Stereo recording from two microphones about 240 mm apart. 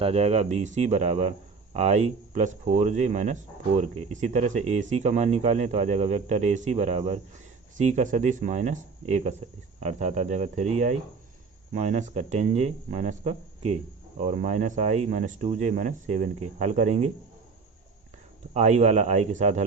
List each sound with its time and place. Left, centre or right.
0.0 s speech: right
18.5 s speech: right